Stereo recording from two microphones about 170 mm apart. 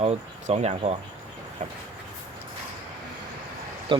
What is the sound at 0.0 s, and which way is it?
Speech, 40° right (ahead or behind).